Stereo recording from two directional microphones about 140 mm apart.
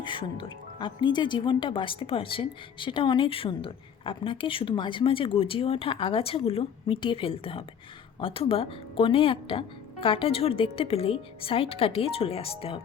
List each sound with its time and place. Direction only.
0.0 s speech: 35° left (ahead or behind)